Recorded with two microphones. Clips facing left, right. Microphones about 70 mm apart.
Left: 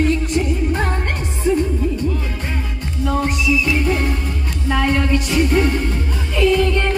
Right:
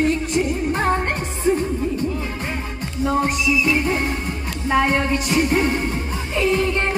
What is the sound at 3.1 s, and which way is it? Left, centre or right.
Music, centre.